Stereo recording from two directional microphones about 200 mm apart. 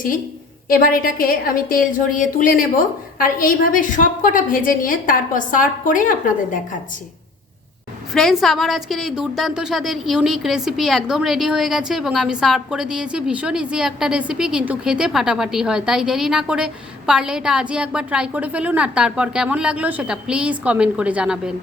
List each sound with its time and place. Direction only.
0.7 s a woman's voice: 45° left (ahead or behind)
8.1 s a woman's voice: centre (ahead or behind)